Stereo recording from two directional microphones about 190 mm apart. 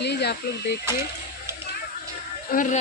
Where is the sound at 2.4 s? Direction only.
45° left (ahead or behind).